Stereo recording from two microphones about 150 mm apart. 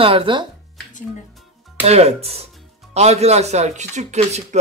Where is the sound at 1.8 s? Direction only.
45° right (ahead or behind).